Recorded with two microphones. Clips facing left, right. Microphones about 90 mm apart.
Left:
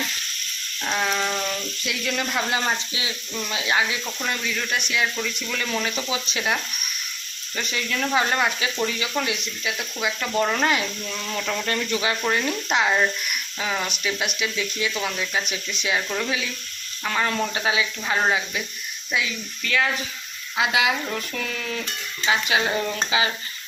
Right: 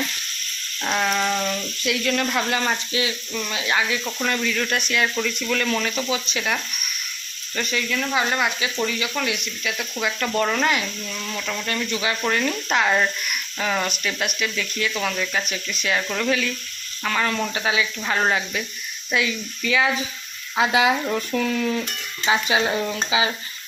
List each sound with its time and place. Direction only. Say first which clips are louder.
0.9 s speech: right 2 dB; centre (ahead or behind)
6.1 s speech: right 1 dB; 20° left (ahead or behind)
7.7 s speech: left 1 dB; 25° left (ahead or behind)
10.6 s speech: even; 30° left (ahead or behind)
11.6 s speech: right 1 dB; 35° left (ahead or behind)
12.3 s speech: right 1 dB; 15° left (ahead or behind)
16.0 s speech: right 5 dB; 5° left (ahead or behind)
17.5 s speech: right 1 dB; 25° left (ahead or behind)
18.1 s speech: even; 10° left (ahead or behind)
19.6 s speech: right 3 dB; 10° right (ahead or behind)
20.6 s speech: right 3 dB; 35° right (ahead or behind)
21.1 s speech: right 6 dB; 15° right (ahead or behind)
22.3 s stir: right 2 dB; 20° right (ahead or behind)
22.7 s speech: right 1 dB; 10° right (ahead or behind)